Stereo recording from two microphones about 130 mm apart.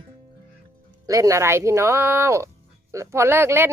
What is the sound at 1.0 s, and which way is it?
Speech, 25° right (ahead or behind).